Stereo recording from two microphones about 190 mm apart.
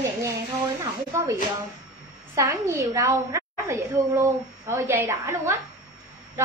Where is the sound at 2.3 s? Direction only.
15° right (ahead or behind).